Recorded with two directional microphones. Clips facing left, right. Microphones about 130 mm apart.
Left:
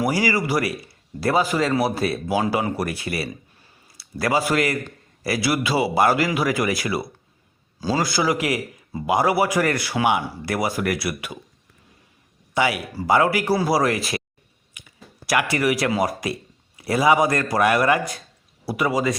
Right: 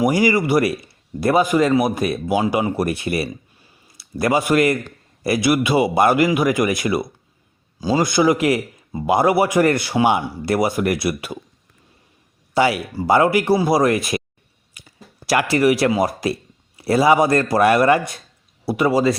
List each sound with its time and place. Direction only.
0.0 s a man's voice: 20° right (ahead or behind)
12.5 s a man's voice: 30° right (ahead or behind)
14.7 s a man's voice: 35° right (ahead or behind)